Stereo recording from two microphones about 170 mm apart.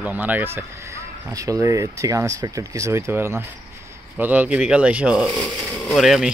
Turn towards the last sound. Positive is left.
turn(degrees=0)  # may be behind; listen again after turning